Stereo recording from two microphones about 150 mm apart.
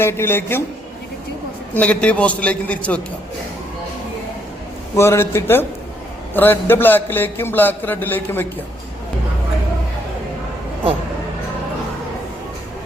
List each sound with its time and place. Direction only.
0.0 s a man's voice: 15° left (ahead or behind)
1.7 s a man's voice: 10° left (ahead or behind)
4.9 s a man's voice: 15° left (ahead or behind)